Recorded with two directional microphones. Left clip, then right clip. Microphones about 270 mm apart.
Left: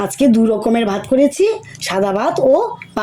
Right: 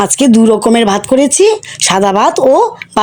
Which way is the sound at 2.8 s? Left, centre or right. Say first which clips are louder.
Right 8 dB; right.